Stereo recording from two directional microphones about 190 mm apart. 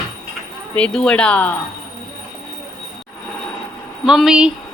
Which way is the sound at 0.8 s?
5° left (ahead or behind).